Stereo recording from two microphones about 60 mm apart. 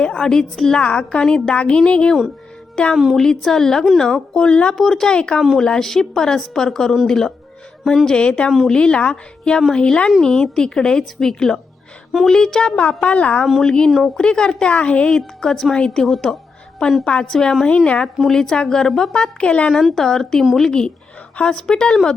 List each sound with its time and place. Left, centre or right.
0.0 s a woman's voice: centre
2.9 s speech: centre
3.2 s a woman's voice: centre
4.4 s a woman's voice: centre
4.8 s a woman's voice: centre
20.0 s a woman's voice: centre